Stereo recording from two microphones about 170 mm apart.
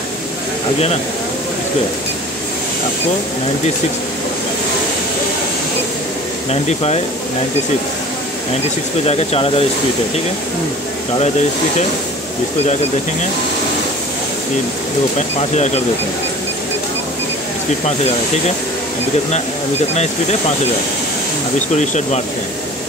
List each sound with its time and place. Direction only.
6.5 s speech: 40° left (ahead or behind)
9.0 s speech: 40° left (ahead or behind)
15.1 s speech: 40° left (ahead or behind)
19.9 s speech: 40° left (ahead or behind)
21.7 s speech: 45° left (ahead or behind)